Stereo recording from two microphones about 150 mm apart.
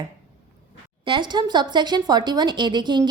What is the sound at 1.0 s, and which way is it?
A woman's voice, 30° right (ahead or behind).